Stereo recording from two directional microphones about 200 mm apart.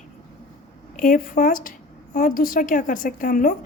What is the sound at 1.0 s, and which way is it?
A woman's voice, 45° left (ahead or behind).